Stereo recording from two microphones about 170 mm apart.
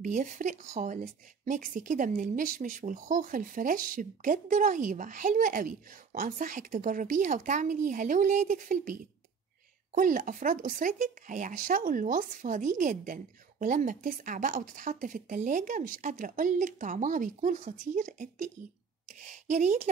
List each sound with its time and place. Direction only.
0.0 s speech: 45° right (ahead or behind)
9.9 s a woman's voice: 55° right (ahead or behind)